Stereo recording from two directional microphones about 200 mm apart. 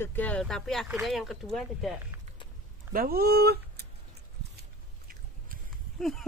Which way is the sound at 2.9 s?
50° right (ahead or behind).